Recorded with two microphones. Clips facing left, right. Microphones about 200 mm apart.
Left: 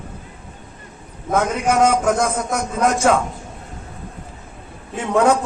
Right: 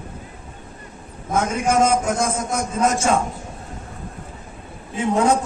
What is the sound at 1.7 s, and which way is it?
A man's voice, 60° left (ahead or behind).